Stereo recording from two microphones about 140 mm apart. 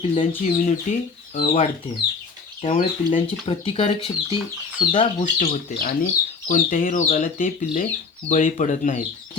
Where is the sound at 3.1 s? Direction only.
40° left (ahead or behind).